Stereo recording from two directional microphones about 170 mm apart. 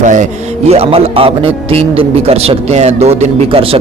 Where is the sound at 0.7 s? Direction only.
35° right (ahead or behind).